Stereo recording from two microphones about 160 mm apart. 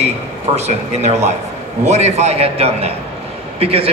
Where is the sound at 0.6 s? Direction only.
45° right (ahead or behind).